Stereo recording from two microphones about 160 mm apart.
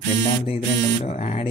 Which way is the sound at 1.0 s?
40° left (ahead or behind).